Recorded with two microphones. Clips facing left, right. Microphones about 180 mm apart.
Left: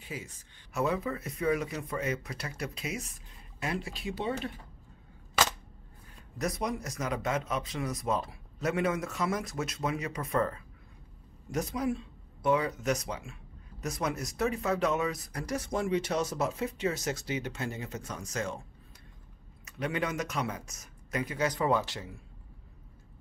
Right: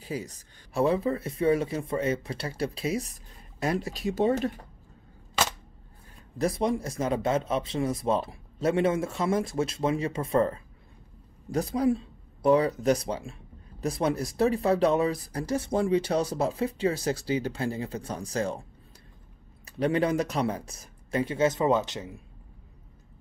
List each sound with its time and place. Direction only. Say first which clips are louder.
0.0 s speech: right 7 dB; 40° right (ahead or behind)
6.3 s speech: right 6 dB; 30° right (ahead or behind)
19.6 s speech: right 8 dB; 35° right (ahead or behind)